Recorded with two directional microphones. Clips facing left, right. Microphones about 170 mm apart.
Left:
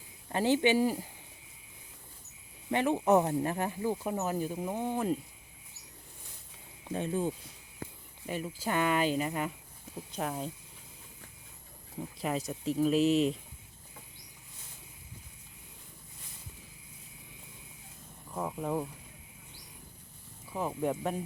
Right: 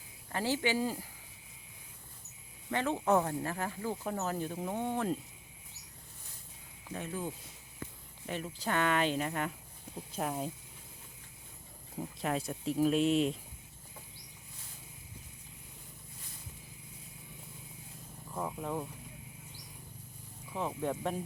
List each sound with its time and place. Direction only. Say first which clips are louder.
0.3 s speech: left 6 dB; 20° left (ahead or behind)
2.6 s speech: left 4 dB; 15° left (ahead or behind)
6.8 s speech: left 7 dB; 30° left (ahead or behind)
8.3 s speech: left 2 dB; 5° left (ahead or behind)
11.9 s speech: left 1 dB; centre (ahead or behind)
18.3 s speech: left 3 dB; 5° left (ahead or behind)
20.5 s speech: left 3 dB; 5° left (ahead or behind)